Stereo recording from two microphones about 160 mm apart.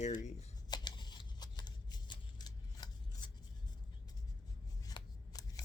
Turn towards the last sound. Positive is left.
turn(degrees=25)  # may be behind; listen again after turning